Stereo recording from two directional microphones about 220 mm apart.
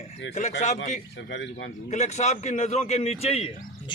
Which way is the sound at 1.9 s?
30° left (ahead or behind).